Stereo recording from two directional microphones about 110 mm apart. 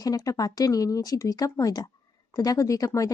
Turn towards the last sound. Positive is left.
turn(degrees=30)  # may be behind; listen again after turning